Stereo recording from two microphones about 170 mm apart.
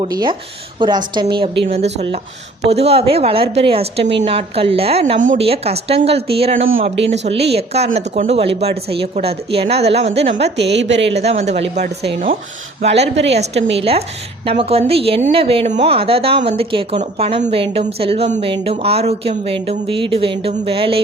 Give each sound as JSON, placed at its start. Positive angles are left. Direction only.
{"t": 0.0, "sound": "a woman's voice", "side_deg": -25}
{"t": 1.6, "sound": "speech", "side_deg": -40}
{"t": 10.3, "sound": "a woman's voice", "side_deg": -90}
{"t": 11.2, "sound": "speech", "side_deg": -40}
{"t": 12.8, "sound": "speech", "side_deg": -40}